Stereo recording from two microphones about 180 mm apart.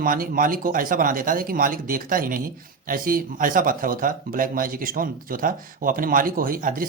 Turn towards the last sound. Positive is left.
turn(degrees=-50)  # may be behind; listen again after turning